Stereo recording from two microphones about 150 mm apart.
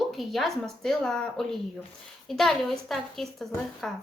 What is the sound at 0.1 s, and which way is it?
A woman's voice, centre (ahead or behind).